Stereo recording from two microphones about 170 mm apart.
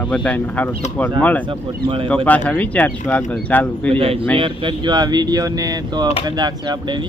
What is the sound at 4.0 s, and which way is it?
Speech, 35° right (ahead or behind).